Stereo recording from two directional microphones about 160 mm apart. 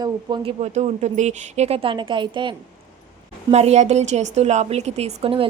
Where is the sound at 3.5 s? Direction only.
45° right (ahead or behind).